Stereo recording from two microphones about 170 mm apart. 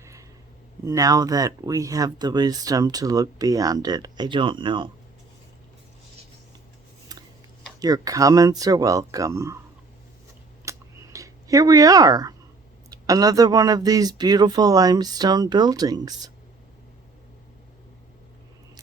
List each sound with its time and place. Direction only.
0.0 s a sound: 20° right (ahead or behind)
0.9 s speech: 20° right (ahead or behind)
7.1 s scissors: 20° right (ahead or behind)
7.8 s speech: 20° right (ahead or behind)
10.7 s a sound: 20° right (ahead or behind)
12.9 s speech: 20° right (ahead or behind)